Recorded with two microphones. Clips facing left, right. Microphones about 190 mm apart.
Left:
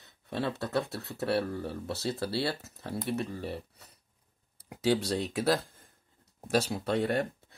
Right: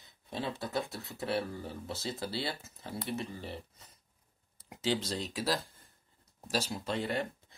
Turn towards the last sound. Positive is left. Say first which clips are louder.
# left 5 dB
turn(degrees=65)  # may be behind; listen again after turning